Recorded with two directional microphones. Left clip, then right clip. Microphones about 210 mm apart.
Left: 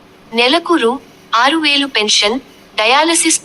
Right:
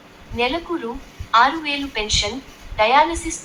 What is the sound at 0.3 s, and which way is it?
A woman's voice, 45° left (ahead or behind).